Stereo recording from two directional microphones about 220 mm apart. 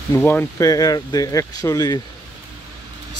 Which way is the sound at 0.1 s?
10° left (ahead or behind).